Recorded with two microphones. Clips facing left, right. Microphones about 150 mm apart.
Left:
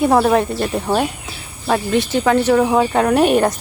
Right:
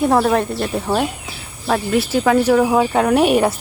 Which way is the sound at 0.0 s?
Centre (ahead or behind).